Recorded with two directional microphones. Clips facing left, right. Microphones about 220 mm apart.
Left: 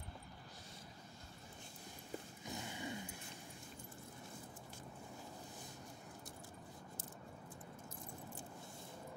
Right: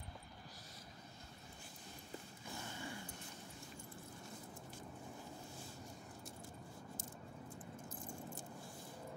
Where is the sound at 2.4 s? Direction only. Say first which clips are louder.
Left 2 dB; 15° left (ahead or behind).